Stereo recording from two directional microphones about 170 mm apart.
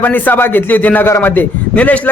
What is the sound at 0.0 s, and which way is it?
Speech, 10° left (ahead or behind).